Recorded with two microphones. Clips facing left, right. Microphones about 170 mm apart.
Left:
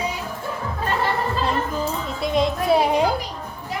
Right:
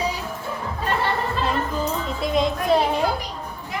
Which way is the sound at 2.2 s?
Centre (ahead or behind).